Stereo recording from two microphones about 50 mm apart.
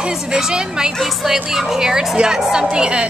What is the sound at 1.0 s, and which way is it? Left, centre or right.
A woman's voice, centre.